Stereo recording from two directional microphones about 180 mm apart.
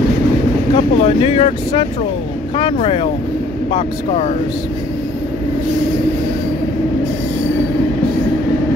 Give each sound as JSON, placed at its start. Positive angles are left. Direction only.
{"t": 0.7, "sound": "speech", "side_deg": 35}